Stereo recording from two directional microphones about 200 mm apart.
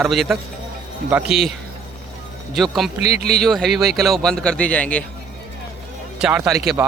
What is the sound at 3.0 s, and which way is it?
Speech, 50° right (ahead or behind).